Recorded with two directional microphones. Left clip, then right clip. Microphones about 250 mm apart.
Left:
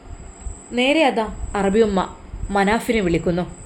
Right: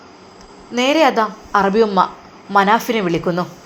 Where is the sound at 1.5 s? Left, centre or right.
Centre.